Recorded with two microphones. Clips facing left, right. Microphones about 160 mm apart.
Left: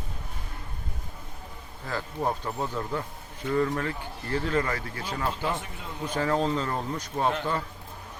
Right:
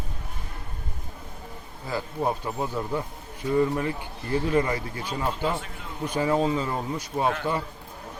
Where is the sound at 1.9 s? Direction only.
10° right (ahead or behind).